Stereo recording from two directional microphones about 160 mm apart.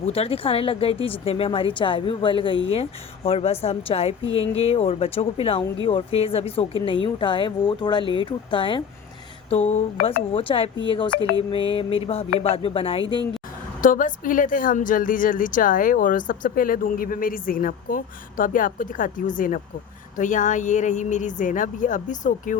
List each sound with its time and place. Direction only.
0.0 s speech: 40° left (ahead or behind)
13.8 s a woman's voice: 55° left (ahead or behind)